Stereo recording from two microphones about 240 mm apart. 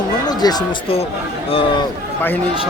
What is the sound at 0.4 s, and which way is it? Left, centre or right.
Speech, left.